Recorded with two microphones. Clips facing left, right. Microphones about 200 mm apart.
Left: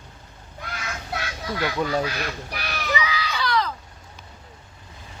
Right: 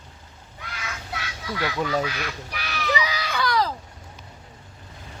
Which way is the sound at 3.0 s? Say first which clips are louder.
Right 1 dB; 45° right (ahead or behind).